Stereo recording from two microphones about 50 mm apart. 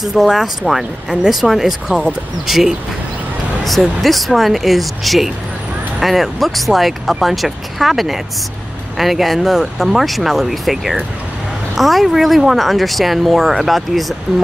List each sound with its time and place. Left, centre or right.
0.0 s speech: centre